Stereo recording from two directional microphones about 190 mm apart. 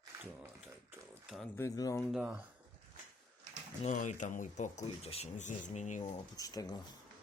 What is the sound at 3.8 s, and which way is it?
Speech, 40° left (ahead or behind).